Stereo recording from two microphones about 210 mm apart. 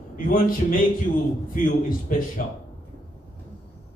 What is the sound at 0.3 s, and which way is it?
A man's voice, 40° left (ahead or behind).